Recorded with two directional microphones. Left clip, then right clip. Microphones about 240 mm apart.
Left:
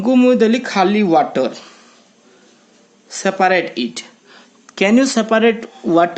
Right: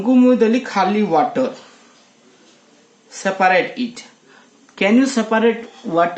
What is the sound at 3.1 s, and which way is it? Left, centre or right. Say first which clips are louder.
Speech: left 1 dB; left.